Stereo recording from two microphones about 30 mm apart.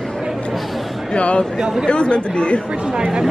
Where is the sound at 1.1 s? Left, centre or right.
Left.